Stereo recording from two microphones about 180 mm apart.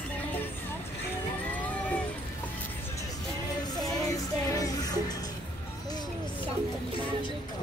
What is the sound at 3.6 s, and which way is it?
Music, 20° left (ahead or behind).